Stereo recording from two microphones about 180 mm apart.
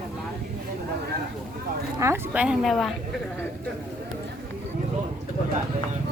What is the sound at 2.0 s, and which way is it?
Speech, 10° right (ahead or behind).